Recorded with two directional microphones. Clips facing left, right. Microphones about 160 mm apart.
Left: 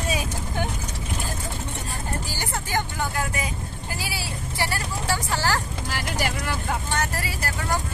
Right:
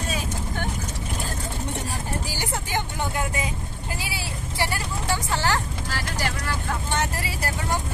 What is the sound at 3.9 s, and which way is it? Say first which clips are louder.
Vehicle: left 2 dB; 20° right (ahead or behind).